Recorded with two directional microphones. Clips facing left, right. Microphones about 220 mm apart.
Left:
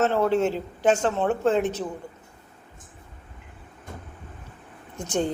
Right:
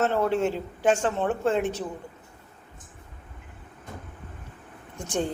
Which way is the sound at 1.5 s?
10° right (ahead or behind).